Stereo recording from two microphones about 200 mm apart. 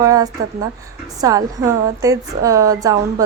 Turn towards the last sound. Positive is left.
turn(degrees=-20)  # may be behind; listen again after turning